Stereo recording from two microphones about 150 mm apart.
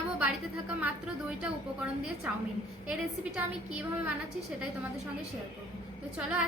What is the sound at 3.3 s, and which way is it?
Speech, 10° right (ahead or behind).